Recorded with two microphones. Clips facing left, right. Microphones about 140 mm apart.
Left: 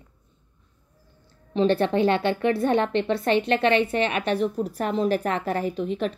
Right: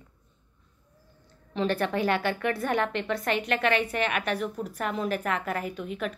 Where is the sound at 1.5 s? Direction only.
25° left (ahead or behind).